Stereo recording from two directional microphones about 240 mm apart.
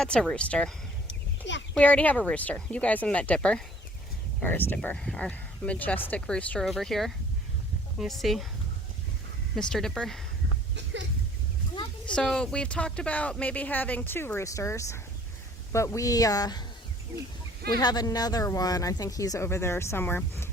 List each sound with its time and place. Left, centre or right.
0.0 s speech: centre
1.0 s a sound: left
1.7 s speech: centre
9.6 s speech: centre
12.0 s speech: centre
17.7 s speech: centre